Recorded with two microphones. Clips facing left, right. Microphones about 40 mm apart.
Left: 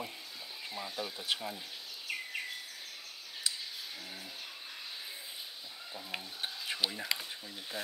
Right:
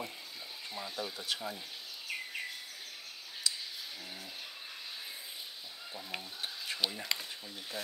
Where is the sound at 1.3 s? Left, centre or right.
Left.